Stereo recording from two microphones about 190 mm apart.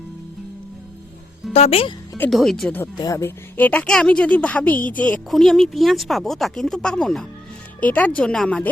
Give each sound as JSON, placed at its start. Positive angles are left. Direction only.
{"t": 1.5, "sound": "speech", "side_deg": 30}
{"t": 2.3, "sound": "a woman's voice", "side_deg": 0}